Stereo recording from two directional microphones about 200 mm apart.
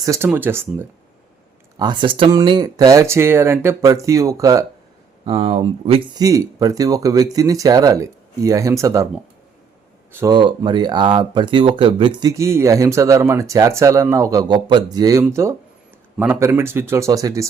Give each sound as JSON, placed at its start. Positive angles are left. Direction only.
{"t": 0.0, "sound": "speech", "side_deg": -15}
{"t": 1.8, "sound": "speech", "side_deg": -20}
{"t": 5.2, "sound": "speech", "side_deg": -25}
{"t": 6.1, "sound": "speech", "side_deg": -15}
{"t": 10.1, "sound": "speech", "side_deg": -10}
{"t": 10.3, "sound": "speech", "side_deg": -25}